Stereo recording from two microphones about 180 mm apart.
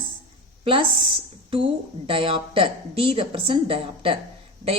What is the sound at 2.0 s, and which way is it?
Speech, 30° right (ahead or behind).